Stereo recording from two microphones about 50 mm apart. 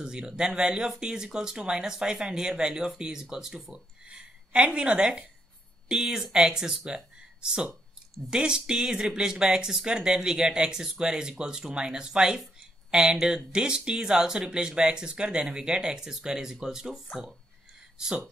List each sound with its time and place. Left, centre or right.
0.0 s speech: centre